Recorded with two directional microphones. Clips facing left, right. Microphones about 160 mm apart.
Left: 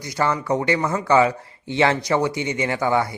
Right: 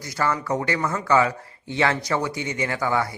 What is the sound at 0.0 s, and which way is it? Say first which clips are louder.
Speech: left 2 dB; 20° left (ahead or behind).